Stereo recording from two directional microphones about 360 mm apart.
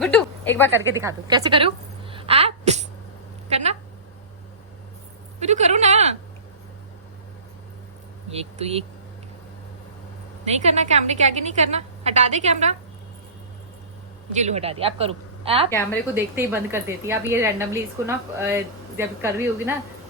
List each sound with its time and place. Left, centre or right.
0.0 s a sound: centre
0.9 s a woman's voice: centre
5.4 s a woman's voice: centre
8.3 s a woman's voice: centre
10.4 s a woman's voice: centre
14.3 s a woman's voice: centre